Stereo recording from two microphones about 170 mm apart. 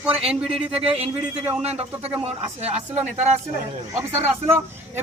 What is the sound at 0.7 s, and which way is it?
Speech, 35° right (ahead or behind).